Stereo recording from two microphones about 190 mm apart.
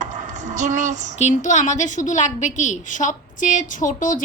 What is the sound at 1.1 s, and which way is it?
A woman's voice, 40° left (ahead or behind).